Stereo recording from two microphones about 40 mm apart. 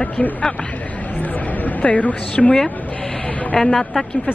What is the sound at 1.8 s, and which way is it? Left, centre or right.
Speech, left.